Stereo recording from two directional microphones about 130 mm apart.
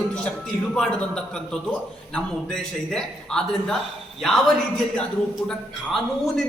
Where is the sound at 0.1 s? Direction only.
10° left (ahead or behind).